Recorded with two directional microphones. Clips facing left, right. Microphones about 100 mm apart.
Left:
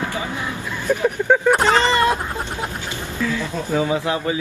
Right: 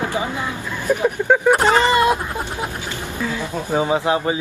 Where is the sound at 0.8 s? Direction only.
10° right (ahead or behind).